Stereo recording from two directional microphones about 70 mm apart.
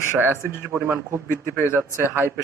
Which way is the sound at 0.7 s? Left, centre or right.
Right.